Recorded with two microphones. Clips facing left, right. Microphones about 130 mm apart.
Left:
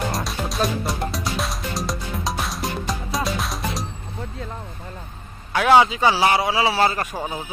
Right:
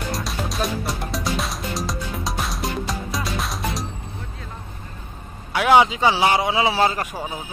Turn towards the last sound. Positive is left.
turn(degrees=-15)  # may be behind; listen again after turning